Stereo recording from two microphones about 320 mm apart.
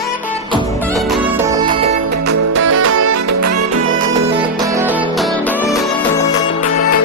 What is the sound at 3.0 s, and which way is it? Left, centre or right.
Music, right.